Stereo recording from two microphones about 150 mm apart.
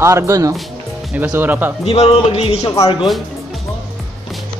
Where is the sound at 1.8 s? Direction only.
45° left (ahead or behind).